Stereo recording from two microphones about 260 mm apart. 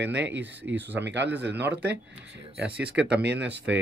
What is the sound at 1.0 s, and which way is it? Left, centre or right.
Speech, right.